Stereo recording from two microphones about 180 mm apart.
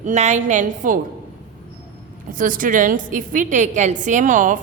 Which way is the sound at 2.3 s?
50° right (ahead or behind).